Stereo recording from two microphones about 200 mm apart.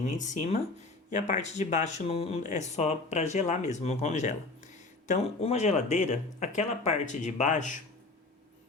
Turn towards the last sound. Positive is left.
turn(degrees=40)  # may be behind; listen again after turning